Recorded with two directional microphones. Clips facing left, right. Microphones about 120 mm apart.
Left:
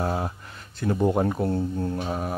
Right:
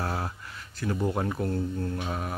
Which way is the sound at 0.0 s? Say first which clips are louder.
Left 5 dB; 15° left (ahead or behind).